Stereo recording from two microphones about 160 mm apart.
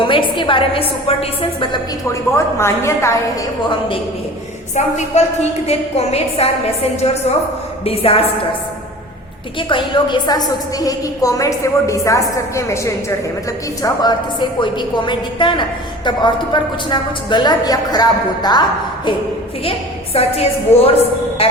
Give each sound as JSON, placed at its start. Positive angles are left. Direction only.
{"t": 0.0, "sound": "a woman's voice", "side_deg": 30}
{"t": 2.3, "sound": "a woman's voice", "side_deg": 15}
{"t": 4.7, "sound": "a woman's voice", "side_deg": 45}
{"t": 9.6, "sound": "a woman's voice", "side_deg": 30}
{"t": 20.1, "sound": "a woman's voice", "side_deg": 40}